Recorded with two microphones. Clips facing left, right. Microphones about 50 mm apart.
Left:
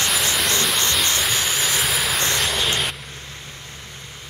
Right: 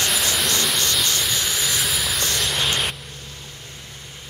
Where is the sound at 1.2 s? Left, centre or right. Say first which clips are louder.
Left 2 dB; centre.